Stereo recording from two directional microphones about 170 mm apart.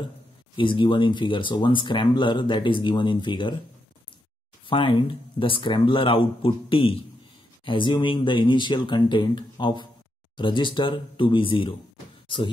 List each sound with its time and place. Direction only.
0.6 s speech: 30° left (ahead or behind)
4.6 s speech: 30° left (ahead or behind)